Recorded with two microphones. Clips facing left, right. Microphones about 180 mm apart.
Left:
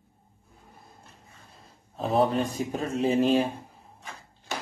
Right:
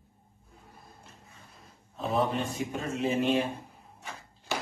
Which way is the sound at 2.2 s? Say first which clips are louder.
Left 5 dB; 35° left (ahead or behind).